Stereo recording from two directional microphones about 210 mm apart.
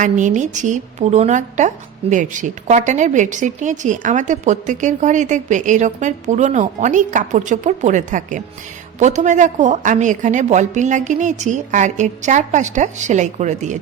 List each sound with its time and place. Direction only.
0.0 s a woman's voice: 35° right (ahead or behind)